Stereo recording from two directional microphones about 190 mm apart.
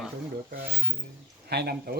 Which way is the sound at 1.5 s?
55° right (ahead or behind).